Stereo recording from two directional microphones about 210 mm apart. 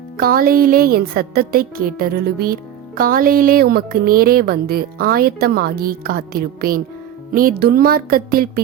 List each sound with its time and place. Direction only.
0.2 s a woman's voice: 45° right (ahead or behind)